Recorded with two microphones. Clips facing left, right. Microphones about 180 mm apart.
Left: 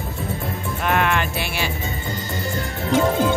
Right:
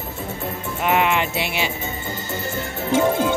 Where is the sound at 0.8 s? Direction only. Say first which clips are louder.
Right 2 dB; 15° right (ahead or behind).